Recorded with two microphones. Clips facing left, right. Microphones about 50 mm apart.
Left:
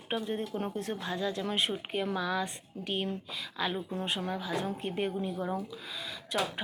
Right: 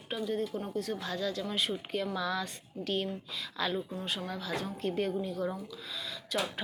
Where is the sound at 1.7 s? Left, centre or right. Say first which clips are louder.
Left 1 dB; left.